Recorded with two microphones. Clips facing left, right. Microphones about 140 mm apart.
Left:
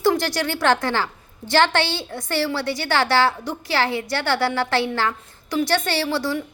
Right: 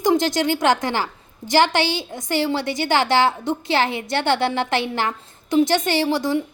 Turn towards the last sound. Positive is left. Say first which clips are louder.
# right 3 dB
turn(degrees=-20)  # may be behind; listen again after turning